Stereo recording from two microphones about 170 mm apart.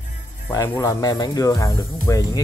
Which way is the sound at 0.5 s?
20° left (ahead or behind).